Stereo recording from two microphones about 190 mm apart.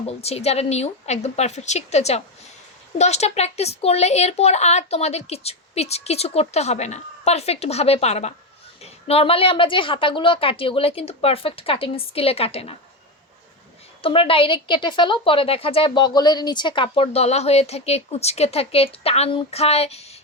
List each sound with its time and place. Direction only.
0.2 s a woman's voice: 35° left (ahead or behind)
14.0 s a woman's voice: 30° left (ahead or behind)